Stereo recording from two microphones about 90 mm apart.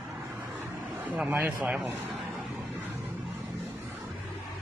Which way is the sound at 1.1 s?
20° right (ahead or behind).